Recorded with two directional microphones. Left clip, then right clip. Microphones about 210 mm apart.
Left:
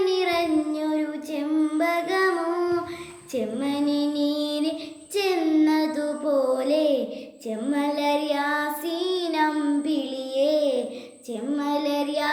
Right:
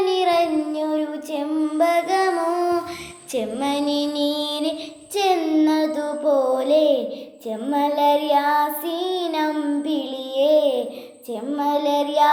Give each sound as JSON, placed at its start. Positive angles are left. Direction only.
{"t": 0.0, "sound": "child singing", "side_deg": 15}
{"t": 3.3, "sound": "female singing", "side_deg": 15}
{"t": 5.1, "sound": "child singing", "side_deg": 15}